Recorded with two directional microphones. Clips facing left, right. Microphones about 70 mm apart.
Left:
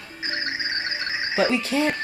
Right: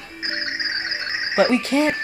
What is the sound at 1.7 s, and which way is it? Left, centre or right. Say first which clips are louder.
Speech: right 4 dB; right.